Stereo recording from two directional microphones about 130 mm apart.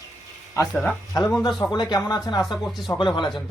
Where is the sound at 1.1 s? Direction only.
25° left (ahead or behind).